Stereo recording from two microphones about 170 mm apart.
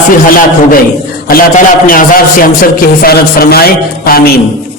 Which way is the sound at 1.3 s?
55° left (ahead or behind).